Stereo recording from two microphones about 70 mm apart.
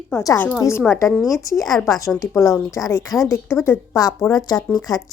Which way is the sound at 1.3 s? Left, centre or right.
Left.